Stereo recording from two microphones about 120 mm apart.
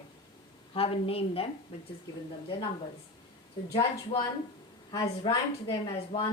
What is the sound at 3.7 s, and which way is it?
Speech, 45° left (ahead or behind).